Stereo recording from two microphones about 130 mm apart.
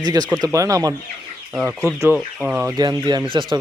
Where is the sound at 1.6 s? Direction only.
10° right (ahead or behind).